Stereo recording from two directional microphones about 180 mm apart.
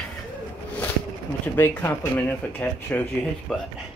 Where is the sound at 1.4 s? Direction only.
10° left (ahead or behind).